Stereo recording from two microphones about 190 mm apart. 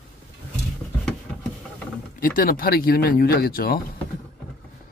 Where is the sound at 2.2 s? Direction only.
45° left (ahead or behind).